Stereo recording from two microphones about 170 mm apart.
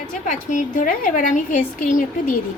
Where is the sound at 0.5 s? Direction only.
50° left (ahead or behind).